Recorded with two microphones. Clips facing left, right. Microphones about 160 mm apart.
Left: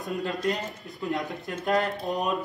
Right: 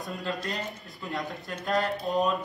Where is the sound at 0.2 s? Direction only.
20° left (ahead or behind).